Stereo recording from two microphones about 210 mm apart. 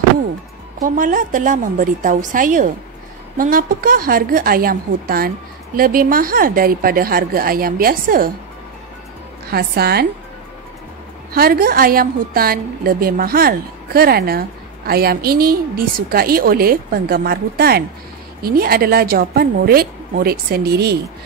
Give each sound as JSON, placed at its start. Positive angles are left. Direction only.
{"t": 0.8, "sound": "a woman's voice", "side_deg": -40}
{"t": 9.5, "sound": "a woman's voice", "side_deg": -50}
{"t": 11.3, "sound": "a woman's voice", "side_deg": -45}